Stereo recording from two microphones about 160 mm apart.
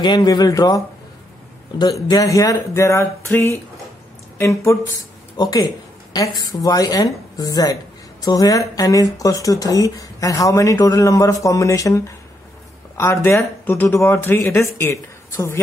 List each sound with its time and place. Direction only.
0.0 s a woman's voice: 30° left (ahead or behind)